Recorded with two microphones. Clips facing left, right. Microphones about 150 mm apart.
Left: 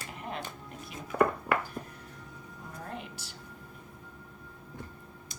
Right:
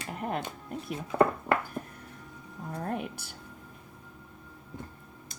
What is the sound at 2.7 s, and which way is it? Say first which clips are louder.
Speech: right 8 dB; 55° right (ahead or behind).